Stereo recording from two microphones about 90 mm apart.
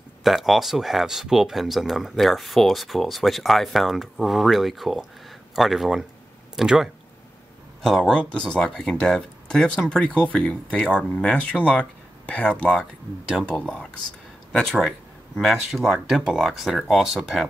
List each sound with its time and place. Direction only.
0.2 s speech: centre (ahead or behind)
7.8 s speech: 5° left (ahead or behind)